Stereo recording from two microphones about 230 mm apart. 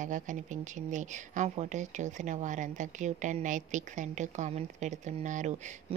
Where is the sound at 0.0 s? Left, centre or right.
Right.